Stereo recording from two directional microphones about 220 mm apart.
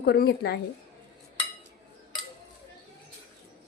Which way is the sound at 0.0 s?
45° left (ahead or behind).